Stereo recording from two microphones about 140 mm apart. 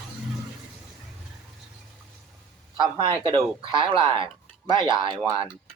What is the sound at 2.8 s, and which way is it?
Speech, 35° right (ahead or behind).